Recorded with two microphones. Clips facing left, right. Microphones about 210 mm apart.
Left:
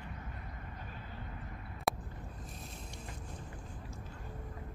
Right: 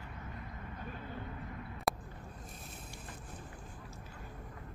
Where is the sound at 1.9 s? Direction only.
Centre (ahead or behind).